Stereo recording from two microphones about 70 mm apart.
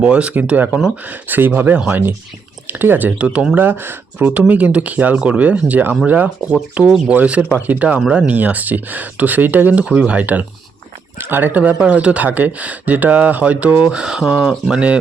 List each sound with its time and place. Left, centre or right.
0.0 s speech: centre
3.2 s speech: centre
3.5 s speech: right